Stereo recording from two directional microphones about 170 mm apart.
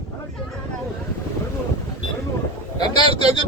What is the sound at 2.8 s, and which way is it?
Speech, 25° left (ahead or behind).